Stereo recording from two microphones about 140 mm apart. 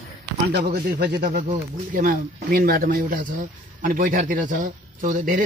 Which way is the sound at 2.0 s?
90° right.